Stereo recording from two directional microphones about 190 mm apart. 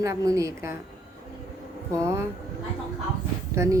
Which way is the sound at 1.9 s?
15° right (ahead or behind).